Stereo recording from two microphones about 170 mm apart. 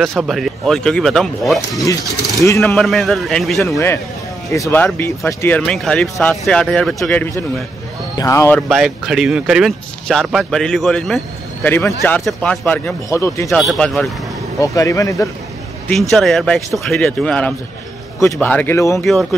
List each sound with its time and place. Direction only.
0.0 s speech: centre (ahead or behind)
2.4 s speech: 15° left (ahead or behind)
2.7 s speech: centre (ahead or behind)
3.6 s speech: 15° left (ahead or behind)
8.5 s speech: centre (ahead or behind)
11.7 s speech: 15° left (ahead or behind)
13.5 s speech: centre (ahead or behind)
14.6 s speech: 20° left (ahead or behind)
15.9 s speech: centre (ahead or behind); by 19.0 s 15° left (ahead or behind)